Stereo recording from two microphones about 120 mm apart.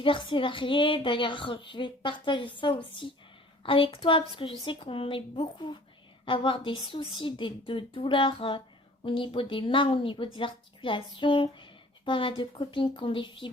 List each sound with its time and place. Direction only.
0.0 s a woman's voice: 45° left (ahead or behind)